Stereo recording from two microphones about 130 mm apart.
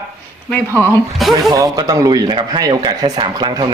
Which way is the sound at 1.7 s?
30° right (ahead or behind).